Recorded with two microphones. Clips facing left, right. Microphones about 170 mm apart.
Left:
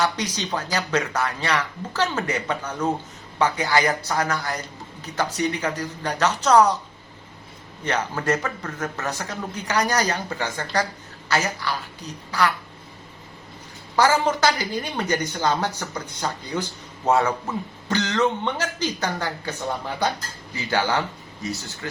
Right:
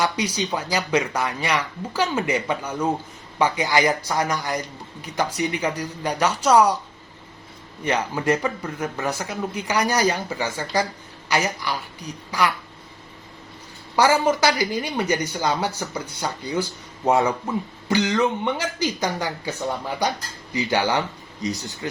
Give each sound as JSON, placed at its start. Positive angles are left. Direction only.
{"t": 0.0, "sound": "speech", "side_deg": -10}
{"t": 7.9, "sound": "speech", "side_deg": -10}
{"t": 13.9, "sound": "speech", "side_deg": -10}